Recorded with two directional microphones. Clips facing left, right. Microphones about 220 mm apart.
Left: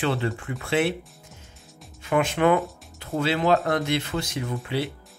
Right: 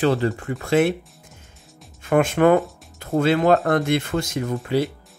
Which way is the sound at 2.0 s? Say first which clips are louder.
Right 5 dB; 50° right (ahead or behind).